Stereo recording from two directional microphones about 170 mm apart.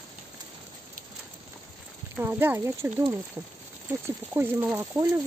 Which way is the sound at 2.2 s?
15° right (ahead or behind).